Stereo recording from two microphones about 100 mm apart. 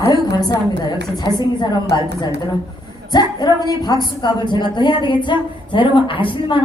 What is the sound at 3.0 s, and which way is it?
Speech, 45° left (ahead or behind).